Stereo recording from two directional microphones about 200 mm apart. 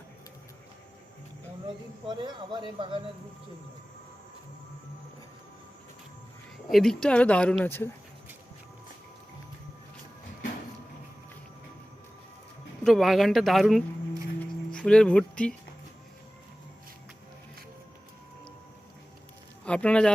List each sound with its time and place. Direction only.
2.0 s a man's voice: 20° right (ahead or behind)
6.7 s speech: centre (ahead or behind)
12.8 s speech: centre (ahead or behind)
19.6 s speech: 5° left (ahead or behind)